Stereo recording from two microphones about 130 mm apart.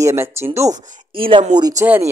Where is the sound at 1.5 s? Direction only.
30° right (ahead or behind).